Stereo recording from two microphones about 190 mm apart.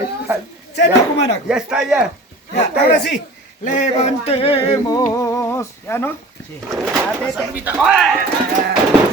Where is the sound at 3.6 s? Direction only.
40° left (ahead or behind); by 6.1 s 15° left (ahead or behind).